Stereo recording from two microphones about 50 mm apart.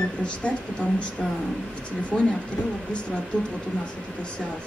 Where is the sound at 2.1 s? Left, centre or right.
Centre.